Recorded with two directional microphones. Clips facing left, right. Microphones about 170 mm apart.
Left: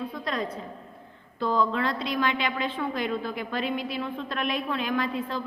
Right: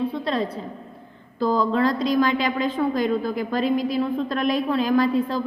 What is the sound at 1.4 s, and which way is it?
A woman's voice, 35° right (ahead or behind).